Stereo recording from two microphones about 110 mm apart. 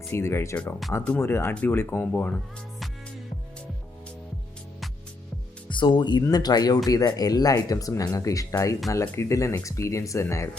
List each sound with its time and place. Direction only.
0.0 s speech: 25° left (ahead or behind)
0.5 s speech: 15° left (ahead or behind)
5.6 s speech: 45° left (ahead or behind); by 10.5 s 25° left (ahead or behind)